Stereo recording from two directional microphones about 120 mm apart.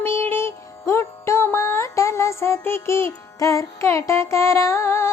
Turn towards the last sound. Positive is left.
turn(degrees=20)  # may be behind; listen again after turning